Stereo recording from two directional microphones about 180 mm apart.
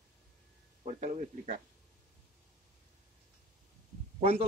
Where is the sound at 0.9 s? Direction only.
40° right (ahead or behind).